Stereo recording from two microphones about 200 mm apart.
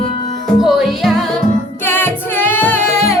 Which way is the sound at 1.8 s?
10° left (ahead or behind).